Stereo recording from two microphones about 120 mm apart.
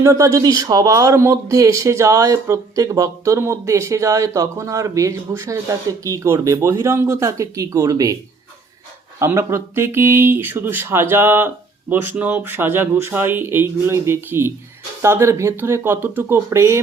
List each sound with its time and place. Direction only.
0.0 s speech: 25° right (ahead or behind)
9.1 s speech: 20° right (ahead or behind)